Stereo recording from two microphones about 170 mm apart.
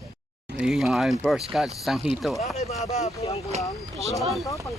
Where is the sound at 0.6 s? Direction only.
Centre (ahead or behind).